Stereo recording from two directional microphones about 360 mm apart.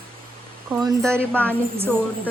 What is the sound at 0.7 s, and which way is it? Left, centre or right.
Speech, centre.